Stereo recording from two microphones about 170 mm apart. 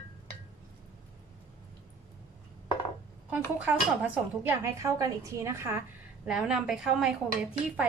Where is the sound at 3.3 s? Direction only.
10° right (ahead or behind).